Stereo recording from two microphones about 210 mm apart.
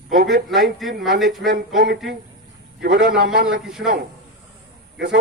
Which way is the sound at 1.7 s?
50° right (ahead or behind).